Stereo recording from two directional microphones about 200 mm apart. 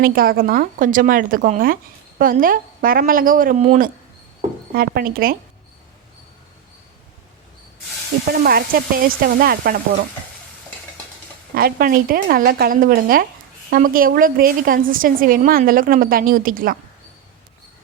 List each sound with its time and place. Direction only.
0.0 s speech: 45° right (ahead or behind)
8.3 s speech: 50° right (ahead or behind)
11.5 s speech: 45° right (ahead or behind)